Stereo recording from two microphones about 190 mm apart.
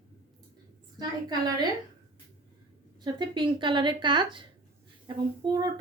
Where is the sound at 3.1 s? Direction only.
25° right (ahead or behind).